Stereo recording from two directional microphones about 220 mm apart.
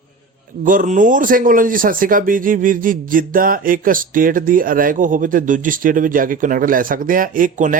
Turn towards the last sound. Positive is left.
turn(degrees=-40)  # may be behind; listen again after turning